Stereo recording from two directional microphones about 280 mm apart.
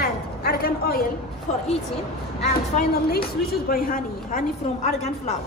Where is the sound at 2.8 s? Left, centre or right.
Left.